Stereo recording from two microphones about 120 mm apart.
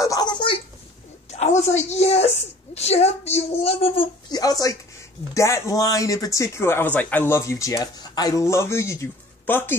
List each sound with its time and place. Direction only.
0.0 s a sound: 35° left (ahead or behind)
1.3 s a woman's voice: 65° left (ahead or behind)
4.3 s speech: 30° left (ahead or behind)